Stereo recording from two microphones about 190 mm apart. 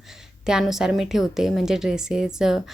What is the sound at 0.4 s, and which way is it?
A woman's voice, 5° right (ahead or behind).